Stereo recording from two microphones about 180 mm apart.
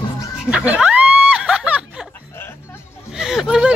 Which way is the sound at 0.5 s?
5° right (ahead or behind).